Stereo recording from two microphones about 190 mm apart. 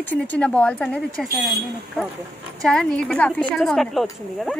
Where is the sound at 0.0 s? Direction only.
10° left (ahead or behind).